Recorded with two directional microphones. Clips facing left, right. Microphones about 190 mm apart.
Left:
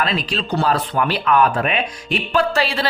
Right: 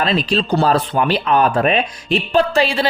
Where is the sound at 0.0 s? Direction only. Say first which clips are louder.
Right 4 dB; 30° right (ahead or behind).